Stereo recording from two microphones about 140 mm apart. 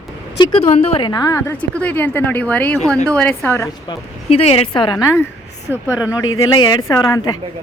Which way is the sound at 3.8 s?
45° left (ahead or behind).